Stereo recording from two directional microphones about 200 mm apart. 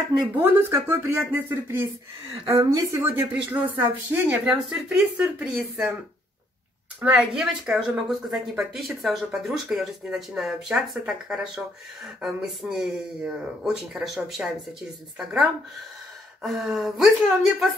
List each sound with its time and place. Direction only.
0.4 s speech: 10° right (ahead or behind)
7.0 s speech: 5° right (ahead or behind)